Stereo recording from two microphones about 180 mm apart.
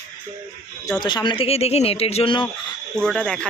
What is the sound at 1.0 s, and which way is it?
Speech, 25° left (ahead or behind).